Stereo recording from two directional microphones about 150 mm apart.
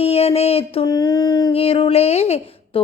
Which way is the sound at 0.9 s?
25° left (ahead or behind).